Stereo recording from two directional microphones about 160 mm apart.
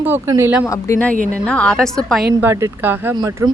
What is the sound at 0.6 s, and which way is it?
Speech, 20° left (ahead or behind).